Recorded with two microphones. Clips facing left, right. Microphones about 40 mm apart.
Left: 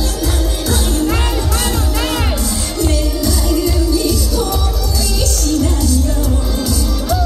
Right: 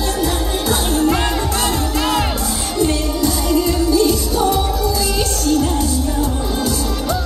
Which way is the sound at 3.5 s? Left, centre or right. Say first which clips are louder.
Right 1 dB; right.